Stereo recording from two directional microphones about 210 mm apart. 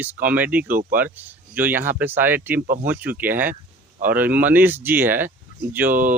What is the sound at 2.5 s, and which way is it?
Speech, 40° right (ahead or behind).